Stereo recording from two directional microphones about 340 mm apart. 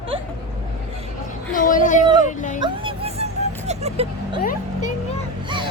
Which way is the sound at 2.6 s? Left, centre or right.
Centre.